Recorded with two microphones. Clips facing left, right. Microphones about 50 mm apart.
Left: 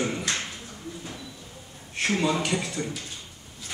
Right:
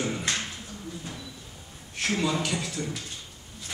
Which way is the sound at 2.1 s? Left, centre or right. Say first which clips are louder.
Left 2 dB; centre.